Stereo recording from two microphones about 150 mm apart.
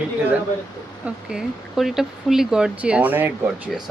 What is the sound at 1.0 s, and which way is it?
Speech, 5° right (ahead or behind).